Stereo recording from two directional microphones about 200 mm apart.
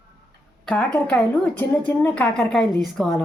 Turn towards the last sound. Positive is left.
turn(degrees=0)  # may be behind; listen again after turning